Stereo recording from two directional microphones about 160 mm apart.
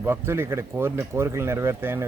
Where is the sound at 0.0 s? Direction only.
15° right (ahead or behind).